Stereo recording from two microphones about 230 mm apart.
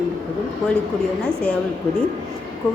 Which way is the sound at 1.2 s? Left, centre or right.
Centre.